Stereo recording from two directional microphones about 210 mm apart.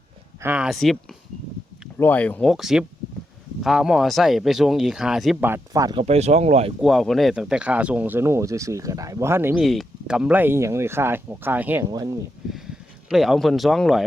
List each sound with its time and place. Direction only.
0.4 s speech: 5° right (ahead or behind)
2.0 s speech: 10° left (ahead or behind); by 6.7 s 30° right (ahead or behind)
6.8 s speech: centre (ahead or behind); by 12.1 s 15° right (ahead or behind)
12.5 s speech: centre (ahead or behind)